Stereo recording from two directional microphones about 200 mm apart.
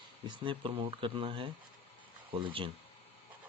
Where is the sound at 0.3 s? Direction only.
25° right (ahead or behind).